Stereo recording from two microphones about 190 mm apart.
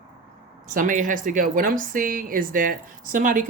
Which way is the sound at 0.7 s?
45° right (ahead or behind).